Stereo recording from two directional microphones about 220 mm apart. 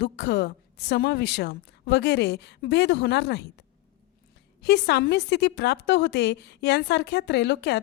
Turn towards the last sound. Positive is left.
turn(degrees=50)  # may be behind; listen again after turning